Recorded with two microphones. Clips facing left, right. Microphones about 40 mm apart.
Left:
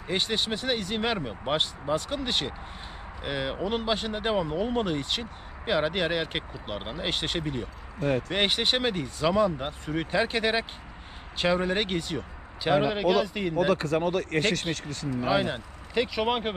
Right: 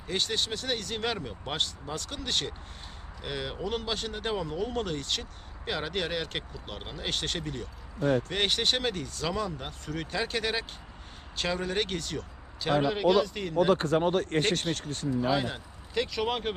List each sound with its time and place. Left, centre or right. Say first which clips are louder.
0.1 s speech: left 3 dB; centre
13.7 s speech: even; right
14.2 s speech: left 1 dB; left
15.3 s speech: left 3 dB; centre